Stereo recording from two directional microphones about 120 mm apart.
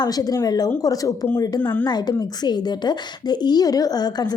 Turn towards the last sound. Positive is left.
turn(degrees=35)  # may be behind; listen again after turning